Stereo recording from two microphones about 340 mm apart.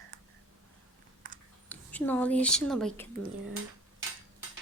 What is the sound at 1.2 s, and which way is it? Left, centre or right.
Typing, right.